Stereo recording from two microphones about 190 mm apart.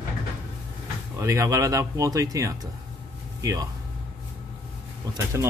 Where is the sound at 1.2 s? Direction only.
15° right (ahead or behind).